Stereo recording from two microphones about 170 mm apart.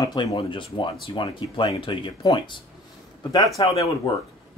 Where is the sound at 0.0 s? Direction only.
25° left (ahead or behind).